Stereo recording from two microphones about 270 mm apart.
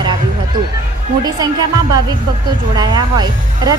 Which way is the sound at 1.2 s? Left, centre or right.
Centre.